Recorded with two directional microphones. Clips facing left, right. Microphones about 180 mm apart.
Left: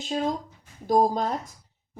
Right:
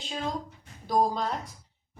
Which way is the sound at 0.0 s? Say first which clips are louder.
Left 6 dB; 40° left (ahead or behind).